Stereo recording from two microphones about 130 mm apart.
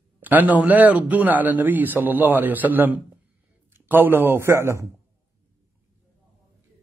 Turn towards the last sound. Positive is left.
turn(degrees=-20)  # may be behind; listen again after turning